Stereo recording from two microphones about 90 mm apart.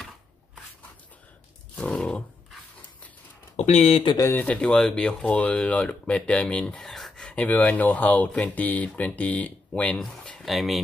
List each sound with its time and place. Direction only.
1.8 s wild animals: 10° left (ahead or behind)
3.9 s speech: 70° left (ahead or behind)
4.3 s speech: 15° left (ahead or behind)
7.3 s speech: 20° left (ahead or behind); by 10.8 s centre (ahead or behind)